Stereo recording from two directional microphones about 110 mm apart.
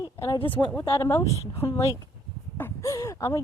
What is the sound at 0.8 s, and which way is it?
Speech, 25° left (ahead or behind).